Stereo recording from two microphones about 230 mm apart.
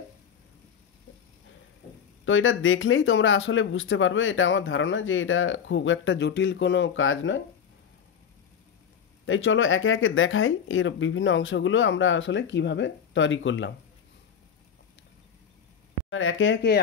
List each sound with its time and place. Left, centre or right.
2.2 s speech: left
9.2 s speech: left
16.1 s speech: left